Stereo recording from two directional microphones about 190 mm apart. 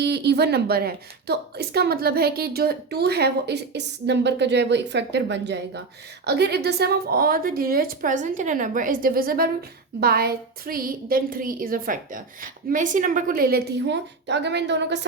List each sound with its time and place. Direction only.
0.0 s a woman's voice: 60° right (ahead or behind)